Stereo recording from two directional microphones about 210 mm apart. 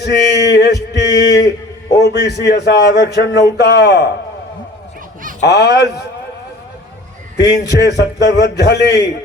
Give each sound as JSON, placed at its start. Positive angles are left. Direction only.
{"t": 0.0, "sound": "male singing", "side_deg": 50}
{"t": 2.0, "sound": "a man's voice", "side_deg": 50}
{"t": 5.4, "sound": "a man's voice", "side_deg": 50}
{"t": 7.8, "sound": "a man's voice", "side_deg": 55}